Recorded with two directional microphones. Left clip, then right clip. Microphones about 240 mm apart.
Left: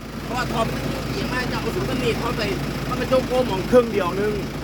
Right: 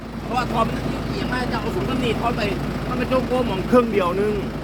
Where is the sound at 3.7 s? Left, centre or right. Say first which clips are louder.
Right 1 dB; centre.